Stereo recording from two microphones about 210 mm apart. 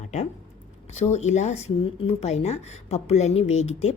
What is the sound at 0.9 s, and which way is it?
Speech, 30° left (ahead or behind).